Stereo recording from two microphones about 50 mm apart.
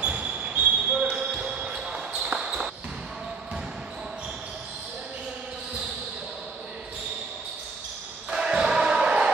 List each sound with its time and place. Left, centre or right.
0.0 s basketball bounce: right
1.1 s basketball bounce: centre
8.3 s basketball bounce: centre